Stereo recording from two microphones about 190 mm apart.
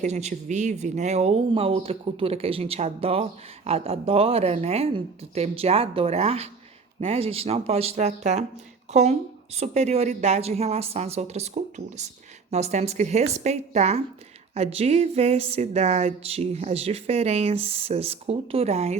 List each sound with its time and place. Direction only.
0.0 s speech: 35° right (ahead or behind)